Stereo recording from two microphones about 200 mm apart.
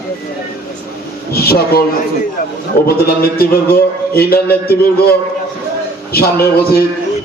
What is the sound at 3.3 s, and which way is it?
A man's voice, 50° left (ahead or behind).